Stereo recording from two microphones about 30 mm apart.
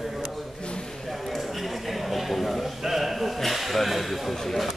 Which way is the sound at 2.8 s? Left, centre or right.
Centre.